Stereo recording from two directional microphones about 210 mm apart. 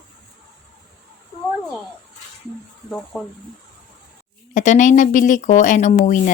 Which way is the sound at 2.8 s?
5° left (ahead or behind).